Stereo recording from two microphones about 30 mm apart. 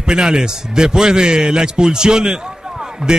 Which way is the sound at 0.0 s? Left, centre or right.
Right.